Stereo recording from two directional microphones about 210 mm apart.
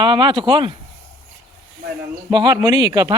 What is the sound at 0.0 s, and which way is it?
Speech, 20° right (ahead or behind).